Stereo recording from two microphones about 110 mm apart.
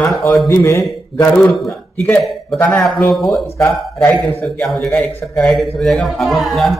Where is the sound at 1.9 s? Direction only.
15° left (ahead or behind).